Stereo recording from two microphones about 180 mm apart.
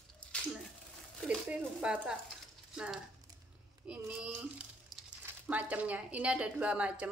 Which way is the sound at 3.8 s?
5° right (ahead or behind).